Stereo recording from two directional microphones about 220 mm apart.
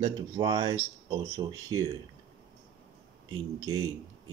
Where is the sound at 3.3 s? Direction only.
15° right (ahead or behind).